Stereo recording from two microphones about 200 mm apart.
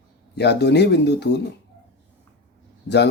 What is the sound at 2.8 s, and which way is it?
Speech, 60° left (ahead or behind).